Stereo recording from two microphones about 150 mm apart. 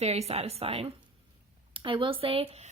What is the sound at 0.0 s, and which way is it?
A woman's voice, 45° right (ahead or behind).